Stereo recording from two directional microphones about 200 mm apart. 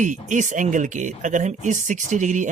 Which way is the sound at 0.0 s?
40° right (ahead or behind).